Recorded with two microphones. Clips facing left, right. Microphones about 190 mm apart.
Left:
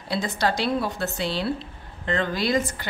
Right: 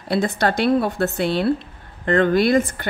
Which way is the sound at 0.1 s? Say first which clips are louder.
Right 5 dB; 55° right (ahead or behind).